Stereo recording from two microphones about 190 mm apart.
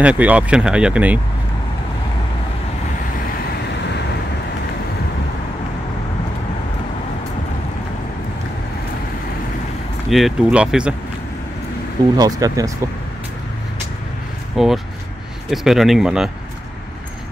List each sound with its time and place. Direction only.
0.0 s speech: 5° right (ahead or behind)
10.0 s speech: centre (ahead or behind)
12.2 s speech: 20° right (ahead or behind)
14.6 s speech: centre (ahead or behind)